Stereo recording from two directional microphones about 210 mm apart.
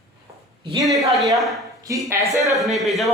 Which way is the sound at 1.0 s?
Centre (ahead or behind).